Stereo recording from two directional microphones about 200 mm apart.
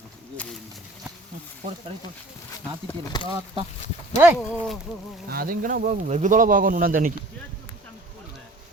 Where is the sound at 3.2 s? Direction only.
20° right (ahead or behind).